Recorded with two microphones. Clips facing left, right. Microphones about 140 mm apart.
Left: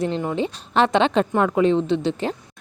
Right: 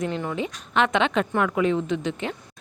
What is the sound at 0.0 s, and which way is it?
A woman's voice, 30° left (ahead or behind).